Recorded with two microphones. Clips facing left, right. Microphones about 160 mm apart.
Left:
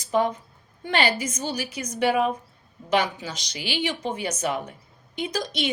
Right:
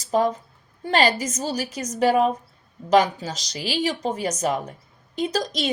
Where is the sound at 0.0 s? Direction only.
35° right (ahead or behind).